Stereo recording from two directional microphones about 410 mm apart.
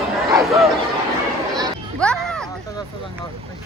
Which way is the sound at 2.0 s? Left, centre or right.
Centre.